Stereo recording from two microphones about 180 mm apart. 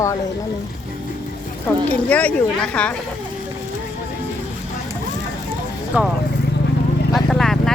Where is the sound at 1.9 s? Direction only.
10° left (ahead or behind).